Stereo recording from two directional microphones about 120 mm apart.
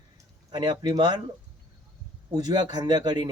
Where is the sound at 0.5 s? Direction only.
35° right (ahead or behind).